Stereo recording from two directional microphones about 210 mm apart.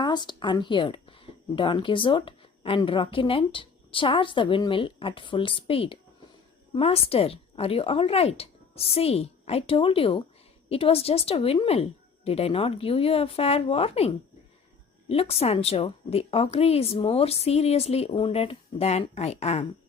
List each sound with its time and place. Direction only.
0.0 s speech: 20° left (ahead or behind)
15.1 s speech: 30° left (ahead or behind)